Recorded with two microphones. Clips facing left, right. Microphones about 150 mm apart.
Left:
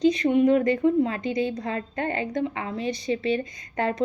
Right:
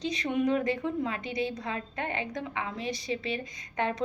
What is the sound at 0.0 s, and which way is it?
A woman's voice, 35° left (ahead or behind).